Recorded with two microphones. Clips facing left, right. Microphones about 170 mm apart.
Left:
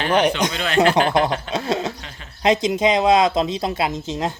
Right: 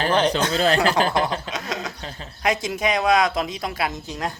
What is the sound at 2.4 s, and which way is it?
Speech, 20° left (ahead or behind).